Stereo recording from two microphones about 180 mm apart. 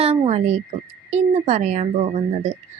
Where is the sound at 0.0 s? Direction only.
35° right (ahead or behind).